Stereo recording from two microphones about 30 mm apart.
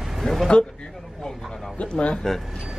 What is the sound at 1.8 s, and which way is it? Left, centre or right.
Speech, left.